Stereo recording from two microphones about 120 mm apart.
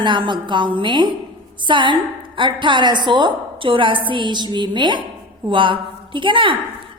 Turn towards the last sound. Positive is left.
turn(degrees=-45)  # may be behind; listen again after turning